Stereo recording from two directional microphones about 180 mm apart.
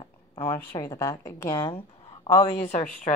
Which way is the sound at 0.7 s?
20° left (ahead or behind).